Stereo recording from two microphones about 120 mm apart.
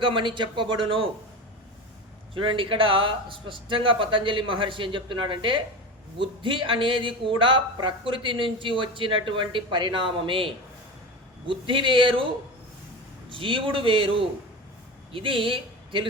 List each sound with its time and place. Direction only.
0.0 s speech: 45° right (ahead or behind)
2.3 s speech: 45° right (ahead or behind)
13.3 s speech: 45° right (ahead or behind)